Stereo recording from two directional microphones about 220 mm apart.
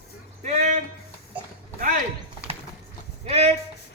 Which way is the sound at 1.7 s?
40° right (ahead or behind).